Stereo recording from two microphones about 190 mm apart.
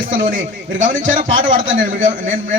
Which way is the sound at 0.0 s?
45° right (ahead or behind).